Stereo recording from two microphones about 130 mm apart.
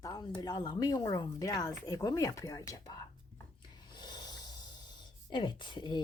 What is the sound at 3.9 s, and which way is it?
Snort, 30° left (ahead or behind).